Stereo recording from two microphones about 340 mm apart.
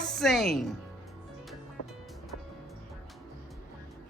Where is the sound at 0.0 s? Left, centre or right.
Centre.